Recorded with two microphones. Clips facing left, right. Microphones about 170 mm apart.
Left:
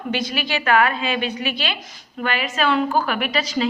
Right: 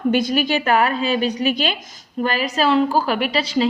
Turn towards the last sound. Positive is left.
turn(degrees=-30)  # may be behind; listen again after turning